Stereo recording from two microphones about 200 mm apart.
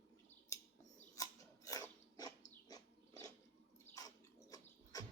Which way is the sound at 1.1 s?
15° left (ahead or behind).